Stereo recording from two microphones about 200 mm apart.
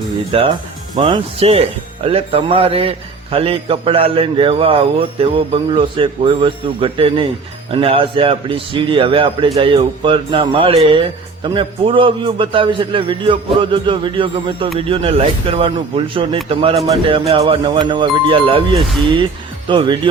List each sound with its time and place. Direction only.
0.3 s a man's voice: 30° right (ahead or behind)